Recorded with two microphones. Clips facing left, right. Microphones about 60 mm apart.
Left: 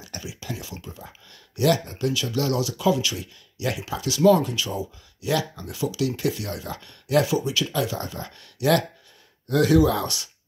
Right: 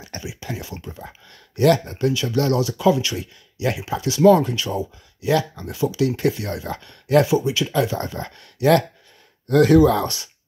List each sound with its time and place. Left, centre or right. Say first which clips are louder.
0.2 s speech: right 3 dB; right